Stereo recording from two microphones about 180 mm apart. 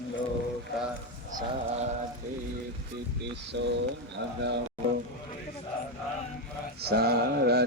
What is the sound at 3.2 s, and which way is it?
Speech, 75° right (ahead or behind).